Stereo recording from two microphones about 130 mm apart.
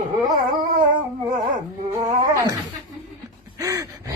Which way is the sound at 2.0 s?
25° right (ahead or behind).